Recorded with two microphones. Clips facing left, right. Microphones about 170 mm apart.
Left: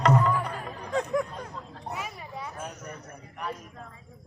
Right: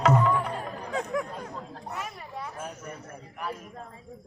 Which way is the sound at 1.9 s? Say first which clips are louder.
Left 2 dB; centre (ahead or behind).